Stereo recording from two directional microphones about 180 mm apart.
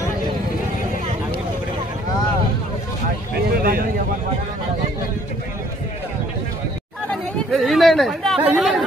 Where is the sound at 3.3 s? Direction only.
55° right (ahead or behind).